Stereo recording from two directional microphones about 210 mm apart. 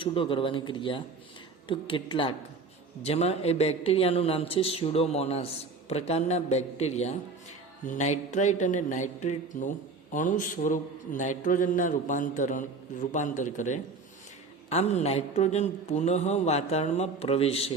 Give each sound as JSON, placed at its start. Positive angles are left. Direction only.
{"t": 0.0, "sound": "a man's voice", "side_deg": 25}